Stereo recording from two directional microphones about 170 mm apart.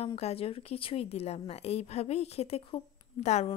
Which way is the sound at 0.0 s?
35° left (ahead or behind).